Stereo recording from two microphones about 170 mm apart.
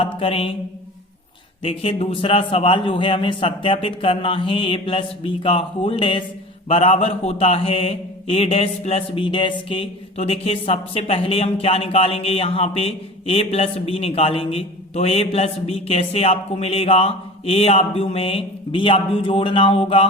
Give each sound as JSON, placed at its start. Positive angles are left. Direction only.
{"t": 0.0, "sound": "mantra", "side_deg": 35}
{"t": 1.6, "sound": "a man's voice", "side_deg": 35}